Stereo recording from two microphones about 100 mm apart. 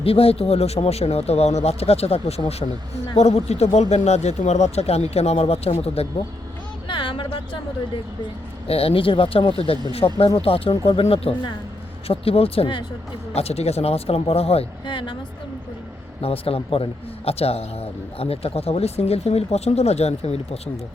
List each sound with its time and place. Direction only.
0.0 s a man's voice: 75° left (ahead or behind)
6.8 s music: 60° left (ahead or behind)
8.6 s speech: 75° left (ahead or behind)
13.3 s a man's voice: 90° left
14.8 s speech: 55° left (ahead or behind)
16.2 s a man's voice: 70° left (ahead or behind); by 20.6 s 90° left